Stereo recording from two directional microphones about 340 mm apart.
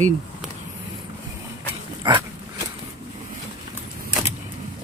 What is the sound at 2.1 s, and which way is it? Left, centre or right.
Dog, centre.